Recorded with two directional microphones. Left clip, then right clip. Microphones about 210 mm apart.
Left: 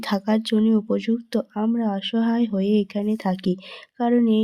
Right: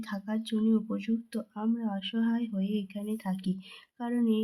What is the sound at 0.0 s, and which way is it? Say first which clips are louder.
Speech: left 13 dB; 40° left (ahead or behind).